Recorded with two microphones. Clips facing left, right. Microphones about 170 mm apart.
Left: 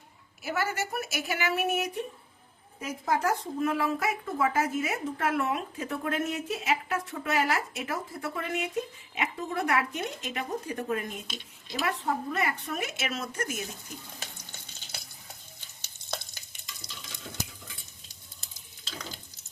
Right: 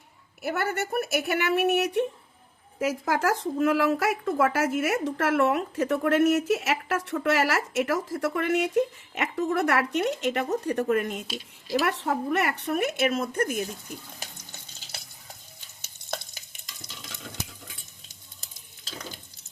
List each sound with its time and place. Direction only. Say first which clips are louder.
0.4 s speech: right 3 dB; 60° right (ahead or behind)
2.7 s speech: right 4 dB; 90° right; by 13.7 s 55° right (ahead or behind)